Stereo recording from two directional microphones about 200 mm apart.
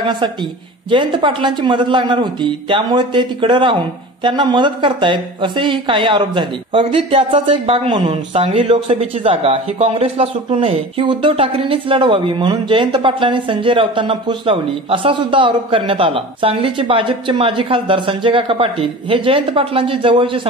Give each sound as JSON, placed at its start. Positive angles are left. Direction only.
{"t": 0.8, "sound": "speech", "side_deg": -25}